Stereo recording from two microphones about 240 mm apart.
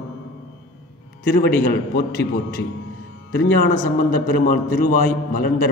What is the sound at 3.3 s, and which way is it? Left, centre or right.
A man's voice, left.